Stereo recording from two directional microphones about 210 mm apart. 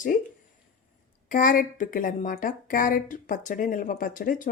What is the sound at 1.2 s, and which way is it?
Speech, 40° left (ahead or behind).